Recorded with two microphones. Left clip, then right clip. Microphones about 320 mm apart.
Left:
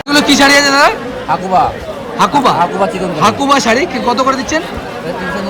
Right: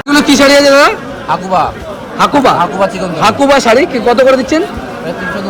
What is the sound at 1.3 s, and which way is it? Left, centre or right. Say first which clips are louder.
Speech: even; centre.